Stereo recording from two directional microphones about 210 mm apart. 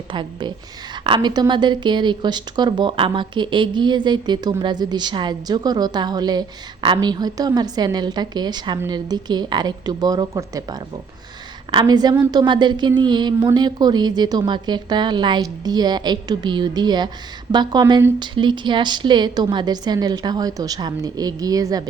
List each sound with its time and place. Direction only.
0.1 s speech: 20° right (ahead or behind)